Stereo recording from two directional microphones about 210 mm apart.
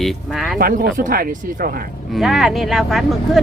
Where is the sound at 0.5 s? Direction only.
45° right (ahead or behind).